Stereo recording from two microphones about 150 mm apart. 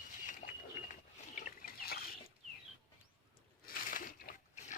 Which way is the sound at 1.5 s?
80° left.